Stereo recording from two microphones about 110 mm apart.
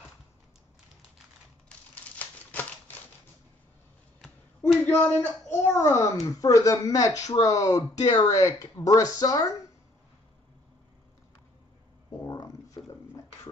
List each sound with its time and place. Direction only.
2.1 s typewriter: 15° left (ahead or behind)
4.8 s speech: 20° left (ahead or behind)